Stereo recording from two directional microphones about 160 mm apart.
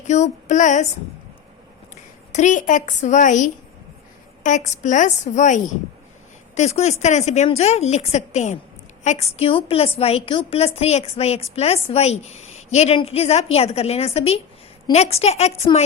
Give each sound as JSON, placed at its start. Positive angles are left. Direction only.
{"t": 0.1, "sound": "a woman's voice", "side_deg": 45}
{"t": 2.3, "sound": "a woman's voice", "side_deg": 50}